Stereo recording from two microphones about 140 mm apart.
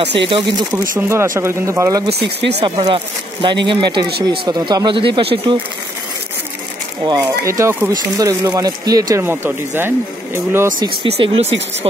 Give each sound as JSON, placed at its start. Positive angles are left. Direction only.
{"t": 0.0, "sound": "speech", "side_deg": -35}
{"t": 0.9, "sound": "speech", "side_deg": -20}
{"t": 2.6, "sound": "speech", "side_deg": -35}
{"t": 7.1, "sound": "speech", "side_deg": -25}
{"t": 9.2, "sound": "speech", "side_deg": -15}
{"t": 11.1, "sound": "speech", "side_deg": -45}